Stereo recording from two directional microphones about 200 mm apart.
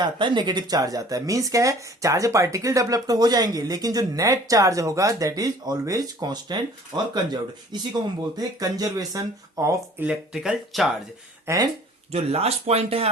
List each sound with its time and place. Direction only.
0.0 s speech: 25° right (ahead or behind); by 10.9 s centre (ahead or behind)
11.4 s speech: 15° right (ahead or behind)
12.1 s speech: 30° right (ahead or behind)